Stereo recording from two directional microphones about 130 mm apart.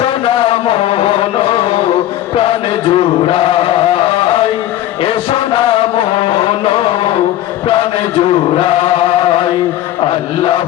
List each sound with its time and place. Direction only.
0.0 s music: 45° left (ahead or behind)
2.3 s chant: 45° left (ahead or behind)
5.0 s music: 45° left (ahead or behind)
8.2 s chant: 45° left (ahead or behind)